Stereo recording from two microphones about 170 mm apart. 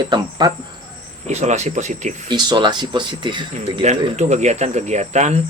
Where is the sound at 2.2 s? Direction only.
25° right (ahead or behind).